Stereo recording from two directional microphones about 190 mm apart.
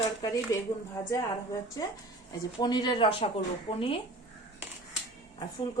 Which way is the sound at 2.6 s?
20° left (ahead or behind).